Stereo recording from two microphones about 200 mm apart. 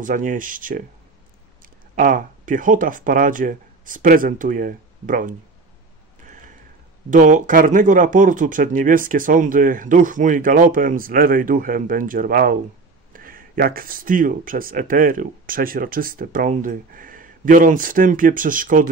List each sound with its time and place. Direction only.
0.0 s speech: 40° right (ahead or behind)
2.0 s speech: 40° right (ahead or behind)
6.2 s a sound: 40° right (ahead or behind)
7.1 s speech: 40° right (ahead or behind)